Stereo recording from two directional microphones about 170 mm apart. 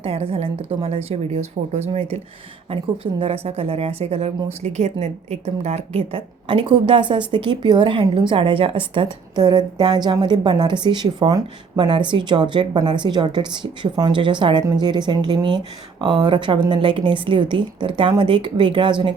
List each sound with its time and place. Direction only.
0.0 s a woman's voice: 35° right (ahead or behind)